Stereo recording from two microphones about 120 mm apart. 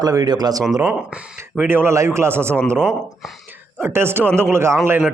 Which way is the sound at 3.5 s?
20° right (ahead or behind).